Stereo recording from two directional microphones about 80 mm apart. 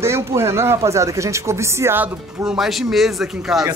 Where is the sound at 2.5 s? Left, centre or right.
Centre.